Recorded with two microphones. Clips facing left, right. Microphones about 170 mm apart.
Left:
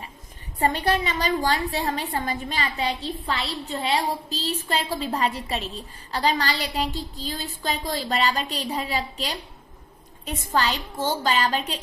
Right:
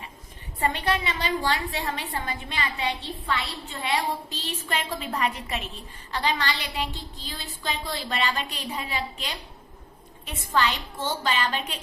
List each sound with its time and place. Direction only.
0.6 s a woman's voice: 40° left (ahead or behind)